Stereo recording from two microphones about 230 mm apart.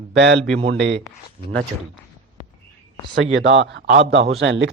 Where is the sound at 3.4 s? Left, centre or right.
Right.